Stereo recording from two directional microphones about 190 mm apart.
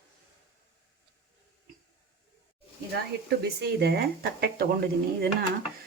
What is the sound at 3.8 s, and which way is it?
Speech, 55° right (ahead or behind).